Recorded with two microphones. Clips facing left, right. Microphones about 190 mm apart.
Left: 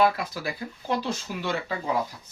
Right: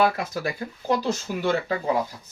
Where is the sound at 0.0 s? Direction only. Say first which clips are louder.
Right 1 dB; 45° right (ahead or behind).